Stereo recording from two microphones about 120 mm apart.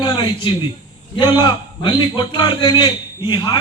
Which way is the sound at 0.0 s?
40° left (ahead or behind).